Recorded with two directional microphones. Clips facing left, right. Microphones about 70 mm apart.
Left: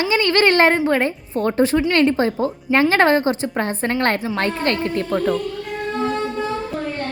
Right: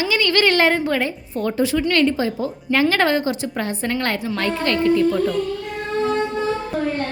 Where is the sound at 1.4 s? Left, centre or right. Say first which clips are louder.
Left 3 dB; left.